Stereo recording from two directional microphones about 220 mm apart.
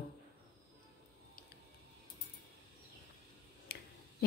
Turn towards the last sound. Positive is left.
turn(degrees=45)  # may be behind; listen again after turning